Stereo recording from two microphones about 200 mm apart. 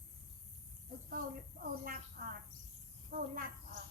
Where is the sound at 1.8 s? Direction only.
45° right (ahead or behind).